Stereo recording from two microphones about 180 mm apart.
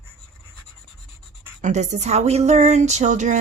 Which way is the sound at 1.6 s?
40° right (ahead or behind).